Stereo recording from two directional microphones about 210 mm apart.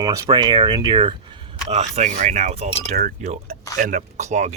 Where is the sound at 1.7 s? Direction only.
30° right (ahead or behind).